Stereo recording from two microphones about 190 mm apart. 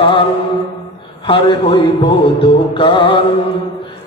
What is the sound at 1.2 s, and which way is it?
Mantra, 25° left (ahead or behind).